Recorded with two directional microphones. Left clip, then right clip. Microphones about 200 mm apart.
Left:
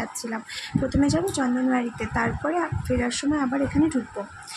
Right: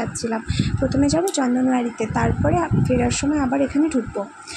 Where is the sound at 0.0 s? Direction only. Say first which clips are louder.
Right 6 dB; 15° right (ahead or behind).